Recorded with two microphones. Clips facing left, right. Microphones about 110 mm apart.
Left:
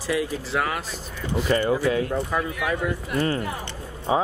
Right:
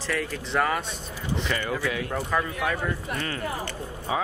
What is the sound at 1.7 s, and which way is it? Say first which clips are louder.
Speech: left 7 dB; 30° left (ahead or behind).